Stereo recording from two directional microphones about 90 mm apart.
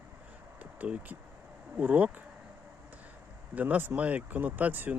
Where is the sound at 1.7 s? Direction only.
20° right (ahead or behind).